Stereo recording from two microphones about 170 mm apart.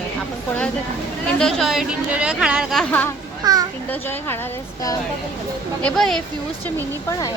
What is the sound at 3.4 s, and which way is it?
Speech, 20° right (ahead or behind).